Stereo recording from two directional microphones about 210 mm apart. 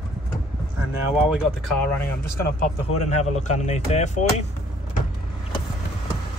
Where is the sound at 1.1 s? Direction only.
5° right (ahead or behind).